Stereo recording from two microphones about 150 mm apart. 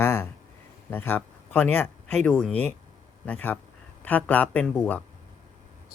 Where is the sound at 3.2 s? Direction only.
10° left (ahead or behind).